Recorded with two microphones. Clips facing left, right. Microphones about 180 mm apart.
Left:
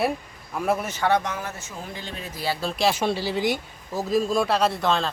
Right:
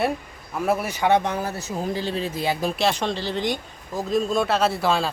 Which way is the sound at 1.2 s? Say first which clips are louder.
Right 5 dB; 35° right (ahead or behind).